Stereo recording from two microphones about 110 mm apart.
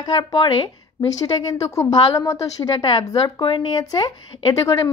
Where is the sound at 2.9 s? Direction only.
40° left (ahead or behind).